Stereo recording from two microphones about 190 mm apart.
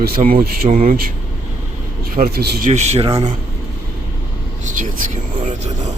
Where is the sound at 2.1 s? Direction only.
50° right (ahead or behind).